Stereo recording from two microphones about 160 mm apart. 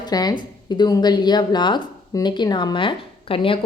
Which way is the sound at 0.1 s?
25° left (ahead or behind).